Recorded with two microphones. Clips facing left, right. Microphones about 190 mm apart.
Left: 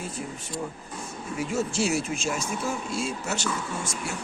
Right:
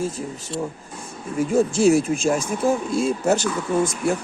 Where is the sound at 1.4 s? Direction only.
50° right (ahead or behind).